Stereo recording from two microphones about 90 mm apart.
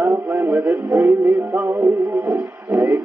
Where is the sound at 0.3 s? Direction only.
20° right (ahead or behind).